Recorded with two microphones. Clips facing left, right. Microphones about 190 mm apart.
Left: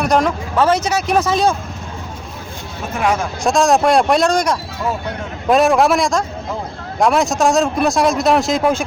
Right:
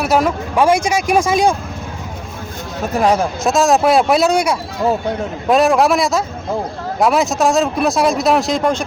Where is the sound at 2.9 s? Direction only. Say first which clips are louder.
Right 4 dB; 35° right (ahead or behind).